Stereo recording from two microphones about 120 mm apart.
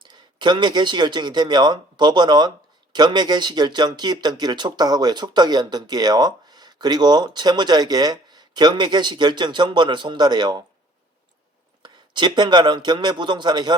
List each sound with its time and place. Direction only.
0.0 s speech: 40° right (ahead or behind)
11.8 s speech: 40° right (ahead or behind)